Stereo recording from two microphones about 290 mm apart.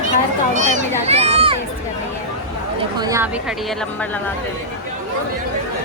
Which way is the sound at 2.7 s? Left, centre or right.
Centre.